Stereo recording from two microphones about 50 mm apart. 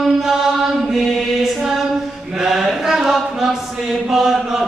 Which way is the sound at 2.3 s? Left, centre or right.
Centre.